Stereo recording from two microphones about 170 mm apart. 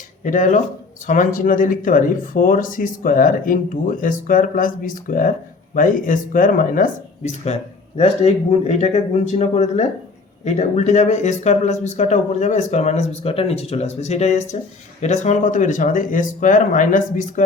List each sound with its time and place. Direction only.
0.3 s speech: 50° left (ahead or behind)
7.4 s speech: 40° left (ahead or behind)